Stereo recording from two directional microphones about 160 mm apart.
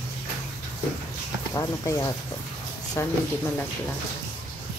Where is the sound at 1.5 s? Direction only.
20° left (ahead or behind).